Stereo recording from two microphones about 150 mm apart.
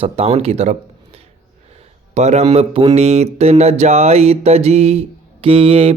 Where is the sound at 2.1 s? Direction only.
45° right (ahead or behind).